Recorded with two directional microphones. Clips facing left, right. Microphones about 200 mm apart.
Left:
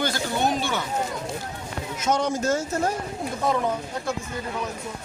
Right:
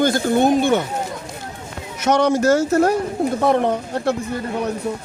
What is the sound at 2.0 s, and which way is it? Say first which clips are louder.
Speech: right 8 dB; 70° right (ahead or behind).